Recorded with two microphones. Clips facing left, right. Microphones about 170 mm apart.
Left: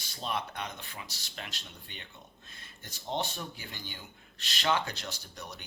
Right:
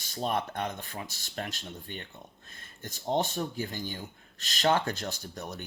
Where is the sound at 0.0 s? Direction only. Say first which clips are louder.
Right 5 dB; 50° right (ahead or behind).